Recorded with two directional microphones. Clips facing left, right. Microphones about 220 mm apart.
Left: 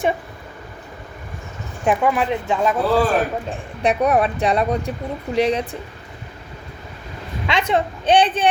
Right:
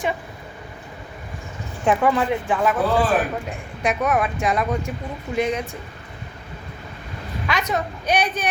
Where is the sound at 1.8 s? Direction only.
15° left (ahead or behind).